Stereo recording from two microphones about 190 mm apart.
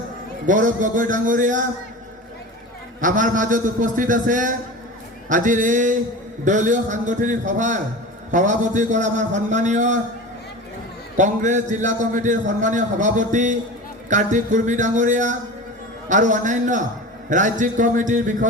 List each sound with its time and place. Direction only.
0.4 s a man's voice: 45° right (ahead or behind)
3.0 s a man's voice: 45° right (ahead or behind)
11.2 s a man's voice: 40° right (ahead or behind)